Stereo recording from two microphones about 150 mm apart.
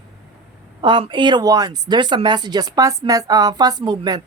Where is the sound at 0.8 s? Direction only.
35° right (ahead or behind).